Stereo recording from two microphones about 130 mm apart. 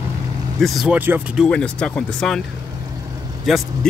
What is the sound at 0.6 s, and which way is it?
Speech, centre (ahead or behind).